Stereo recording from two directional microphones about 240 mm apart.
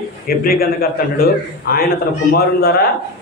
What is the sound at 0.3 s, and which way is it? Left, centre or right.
A man's voice, left.